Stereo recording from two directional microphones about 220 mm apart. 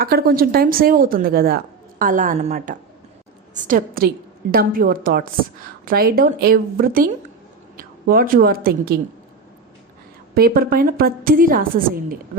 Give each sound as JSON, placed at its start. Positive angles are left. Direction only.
{"t": 0.0, "sound": "a woman's voice", "side_deg": -45}
{"t": 10.3, "sound": "speech", "side_deg": -40}